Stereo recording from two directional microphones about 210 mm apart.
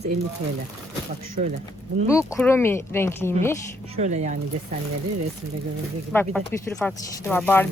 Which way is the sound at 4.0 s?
35° right (ahead or behind).